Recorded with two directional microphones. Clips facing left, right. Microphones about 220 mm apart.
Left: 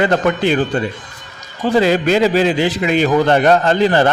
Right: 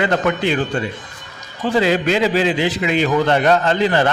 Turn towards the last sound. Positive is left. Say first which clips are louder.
# left 3 dB
turn(degrees=40)  # may be behind; listen again after turning